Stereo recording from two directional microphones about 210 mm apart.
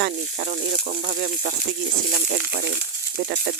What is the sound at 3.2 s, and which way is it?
Speech, 50° right (ahead or behind).